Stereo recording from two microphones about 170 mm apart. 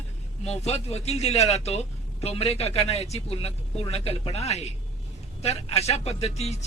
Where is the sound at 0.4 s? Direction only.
40° left (ahead or behind).